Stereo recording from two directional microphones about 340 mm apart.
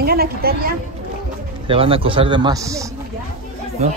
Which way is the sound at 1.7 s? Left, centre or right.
Centre.